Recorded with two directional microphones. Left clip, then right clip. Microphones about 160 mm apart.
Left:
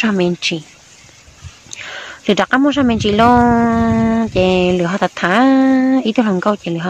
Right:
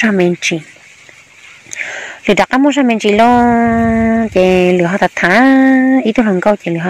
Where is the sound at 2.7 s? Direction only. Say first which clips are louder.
Right 4 dB; 10° left (ahead or behind).